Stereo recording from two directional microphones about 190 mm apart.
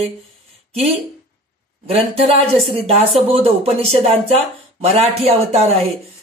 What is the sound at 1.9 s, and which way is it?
Speech, 30° right (ahead or behind).